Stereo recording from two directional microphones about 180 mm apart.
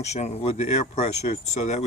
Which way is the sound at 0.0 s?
40° left (ahead or behind).